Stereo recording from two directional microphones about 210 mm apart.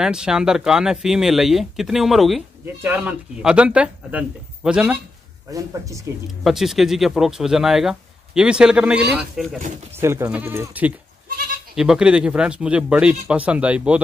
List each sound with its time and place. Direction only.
0.0 s speech: 5° right (ahead or behind)
5.5 s speech: 15° right (ahead or behind)
6.4 s speech: centre (ahead or behind)